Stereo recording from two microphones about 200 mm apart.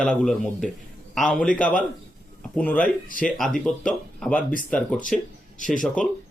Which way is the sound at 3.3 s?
Centre (ahead or behind).